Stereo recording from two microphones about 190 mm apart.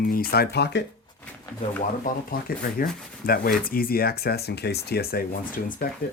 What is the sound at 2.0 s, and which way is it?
Speech, 50° left (ahead or behind).